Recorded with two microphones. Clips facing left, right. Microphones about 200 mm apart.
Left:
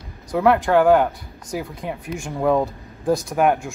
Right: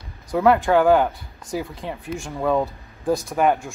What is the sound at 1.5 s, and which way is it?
Speech, 10° left (ahead or behind).